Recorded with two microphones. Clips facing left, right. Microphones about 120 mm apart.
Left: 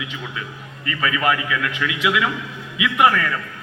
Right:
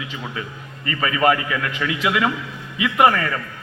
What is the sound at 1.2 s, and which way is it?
A man's voice, 40° right (ahead or behind).